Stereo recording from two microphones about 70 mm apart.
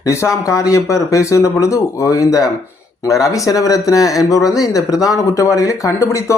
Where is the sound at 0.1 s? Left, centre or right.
Left.